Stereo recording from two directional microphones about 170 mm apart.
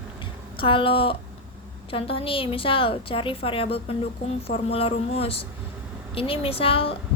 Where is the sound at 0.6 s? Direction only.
30° left (ahead or behind).